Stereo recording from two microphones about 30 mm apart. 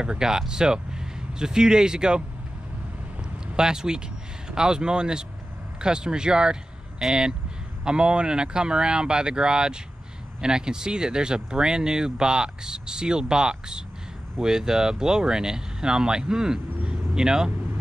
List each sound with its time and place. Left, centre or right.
0.0 s speech: right
3.5 s speech: right
7.0 s speech: centre
7.8 s speech: right